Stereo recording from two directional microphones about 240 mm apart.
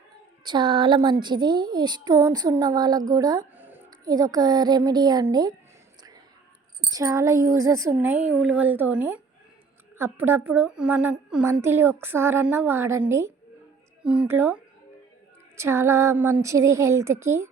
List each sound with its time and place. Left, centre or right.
0.4 s a woman's voice: centre
6.9 s a woman's voice: centre